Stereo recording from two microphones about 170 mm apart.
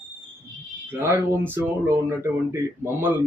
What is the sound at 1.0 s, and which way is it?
Speech, 15° right (ahead or behind).